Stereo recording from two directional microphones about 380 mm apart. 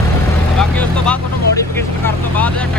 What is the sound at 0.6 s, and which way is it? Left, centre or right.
Speech, centre.